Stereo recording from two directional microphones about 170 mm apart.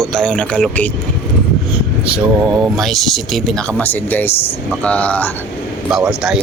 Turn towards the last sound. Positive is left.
turn(degrees=-5)  # may be behind; listen again after turning